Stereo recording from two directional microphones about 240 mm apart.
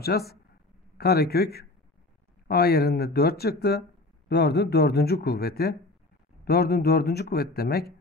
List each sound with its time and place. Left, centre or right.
0.1 s speech: left